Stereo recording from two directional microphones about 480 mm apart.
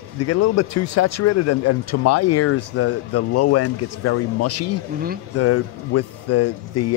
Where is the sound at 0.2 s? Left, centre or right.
Left.